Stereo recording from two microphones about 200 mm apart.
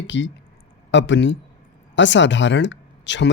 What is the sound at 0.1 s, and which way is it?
Speech, 65° left (ahead or behind).